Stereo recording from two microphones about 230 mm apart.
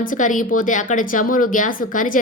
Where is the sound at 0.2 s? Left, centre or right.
Left.